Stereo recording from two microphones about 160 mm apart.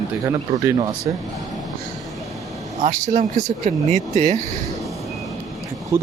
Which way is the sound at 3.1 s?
50° right (ahead or behind).